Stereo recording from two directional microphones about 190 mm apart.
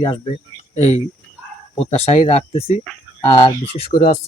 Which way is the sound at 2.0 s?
35° left (ahead or behind).